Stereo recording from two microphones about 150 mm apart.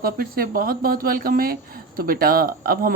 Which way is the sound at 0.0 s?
80° right.